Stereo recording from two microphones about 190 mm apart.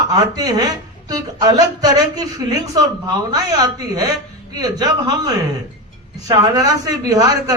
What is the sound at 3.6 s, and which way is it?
Speech, 20° right (ahead or behind).